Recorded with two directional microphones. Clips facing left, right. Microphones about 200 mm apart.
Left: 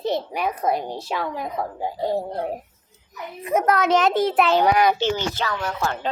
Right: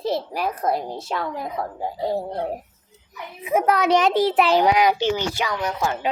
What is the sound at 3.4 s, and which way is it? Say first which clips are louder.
A child's voice: even; 10° right (ahead or behind).